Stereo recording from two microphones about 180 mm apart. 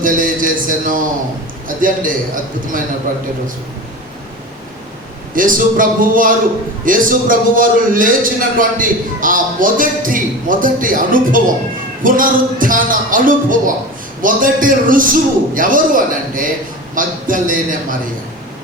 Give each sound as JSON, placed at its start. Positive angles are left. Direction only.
{"t": 0.0, "sound": "music", "side_deg": -50}
{"t": 1.6, "sound": "a man's voice", "side_deg": -50}
{"t": 5.3, "sound": "a man's voice", "side_deg": -50}